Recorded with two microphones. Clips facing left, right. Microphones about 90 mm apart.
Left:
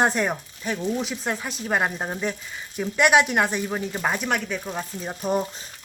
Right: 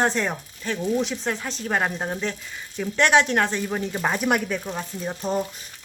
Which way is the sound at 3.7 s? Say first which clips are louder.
Right 1 dB; centre (ahead or behind).